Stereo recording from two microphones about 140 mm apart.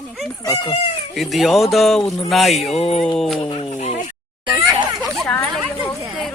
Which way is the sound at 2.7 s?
45° left (ahead or behind).